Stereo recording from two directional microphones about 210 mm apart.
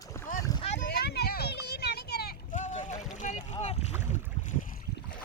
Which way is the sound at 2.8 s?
35° left (ahead or behind).